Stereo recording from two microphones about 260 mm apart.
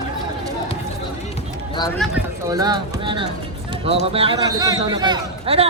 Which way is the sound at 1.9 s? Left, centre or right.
Centre.